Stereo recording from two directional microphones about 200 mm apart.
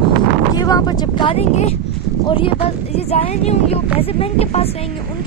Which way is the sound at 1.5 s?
35° left (ahead or behind).